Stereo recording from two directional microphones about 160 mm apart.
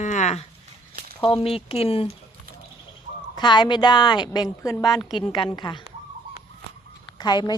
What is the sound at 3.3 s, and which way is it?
A woman's voice, 30° left (ahead or behind).